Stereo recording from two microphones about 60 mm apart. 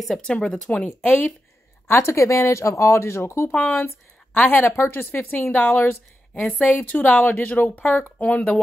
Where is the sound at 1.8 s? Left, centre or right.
Left.